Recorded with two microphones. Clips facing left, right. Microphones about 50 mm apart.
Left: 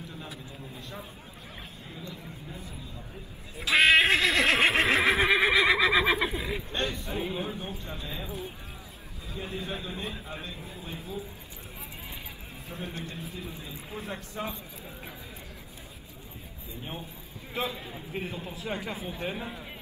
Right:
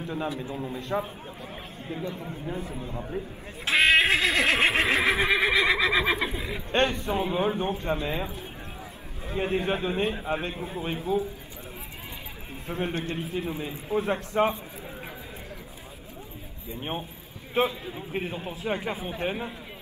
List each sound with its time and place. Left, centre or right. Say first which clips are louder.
0.0 s a man's voice: right 11 dB; right
3.7 s neigh: even; centre
6.7 s a man's voice: right 12 dB; right
9.3 s a man's voice: right 9 dB; right
10.8 s speech: right 12 dB; right
12.6 s a man's voice: right 9 dB; right
17.6 s speech: right 7 dB; right